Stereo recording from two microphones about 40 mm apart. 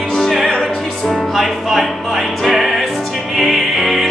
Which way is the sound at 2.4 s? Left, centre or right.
Centre.